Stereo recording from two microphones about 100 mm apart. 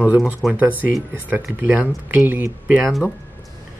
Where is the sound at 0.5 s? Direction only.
15° right (ahead or behind).